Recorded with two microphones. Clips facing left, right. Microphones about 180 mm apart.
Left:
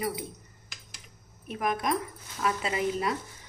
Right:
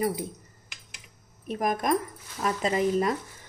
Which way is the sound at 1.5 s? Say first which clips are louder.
Right 3 dB; 40° right (ahead or behind).